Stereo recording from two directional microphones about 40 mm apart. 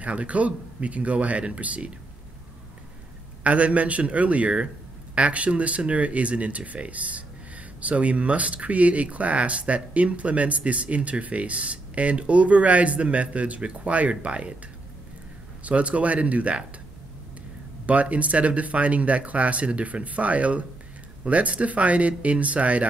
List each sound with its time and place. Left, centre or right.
0.0 s speech: right
3.4 s speech: right
15.6 s speech: right
17.8 s speech: right